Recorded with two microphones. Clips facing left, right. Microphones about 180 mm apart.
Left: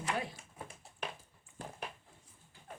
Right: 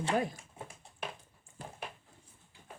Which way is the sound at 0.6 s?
25° right (ahead or behind).